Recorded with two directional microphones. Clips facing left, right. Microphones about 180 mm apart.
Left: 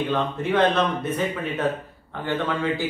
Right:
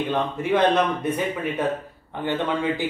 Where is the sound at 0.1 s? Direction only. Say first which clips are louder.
Right 3 dB; 10° right (ahead or behind).